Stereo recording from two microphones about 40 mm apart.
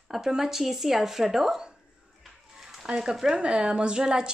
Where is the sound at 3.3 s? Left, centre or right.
Right.